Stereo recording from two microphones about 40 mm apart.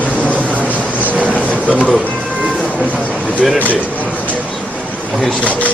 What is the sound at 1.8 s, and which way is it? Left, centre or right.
Speech, left.